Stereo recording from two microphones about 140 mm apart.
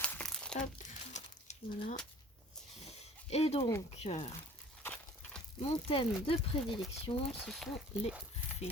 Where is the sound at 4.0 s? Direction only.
50° left (ahead or behind).